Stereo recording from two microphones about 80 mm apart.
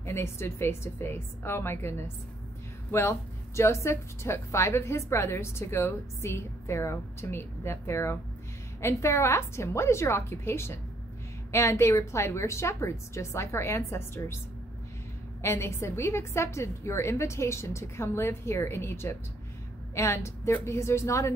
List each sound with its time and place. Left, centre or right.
0.0 s speech: left
15.4 s a woman's voice: left